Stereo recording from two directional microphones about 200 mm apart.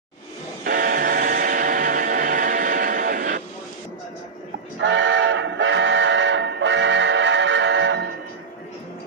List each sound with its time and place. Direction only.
0.7 s train: 45° right (ahead or behind)
4.7 s train: 65° right (ahead or behind)